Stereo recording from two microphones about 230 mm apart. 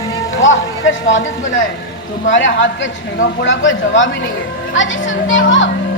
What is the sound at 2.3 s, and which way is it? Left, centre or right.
A man's voice, left.